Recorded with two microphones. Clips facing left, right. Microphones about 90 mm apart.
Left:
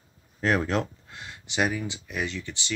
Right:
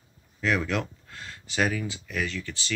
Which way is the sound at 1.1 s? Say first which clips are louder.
Even; 20° left (ahead or behind).